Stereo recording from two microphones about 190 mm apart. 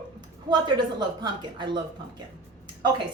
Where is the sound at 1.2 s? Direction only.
25° right (ahead or behind).